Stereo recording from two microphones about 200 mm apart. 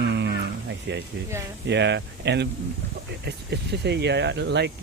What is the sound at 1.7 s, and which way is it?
Speech, 60° right (ahead or behind).